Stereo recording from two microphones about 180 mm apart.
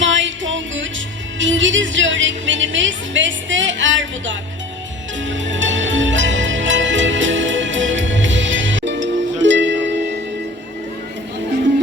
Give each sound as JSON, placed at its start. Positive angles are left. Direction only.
{"t": 0.0, "sound": "music", "side_deg": -90}